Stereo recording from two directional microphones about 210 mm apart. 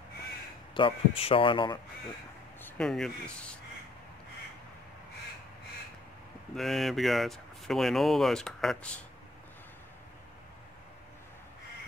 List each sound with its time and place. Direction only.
0.7 s speech: 25° left (ahead or behind)
2.6 s a sound: 5° left (ahead or behind)
6.5 s speech: centre (ahead or behind)